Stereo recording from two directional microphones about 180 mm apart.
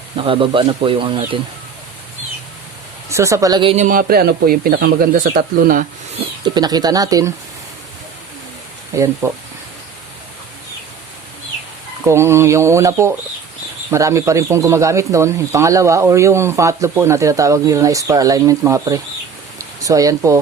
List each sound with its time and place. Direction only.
0.2 s speech: 30° right (ahead or behind)
3.1 s speech: 15° right (ahead or behind)
3.8 s speech: 55° right (ahead or behind)
6.4 s speech: 20° right (ahead or behind)
8.9 s speech: 15° right (ahead or behind)
12.0 s speech: 15° right (ahead or behind)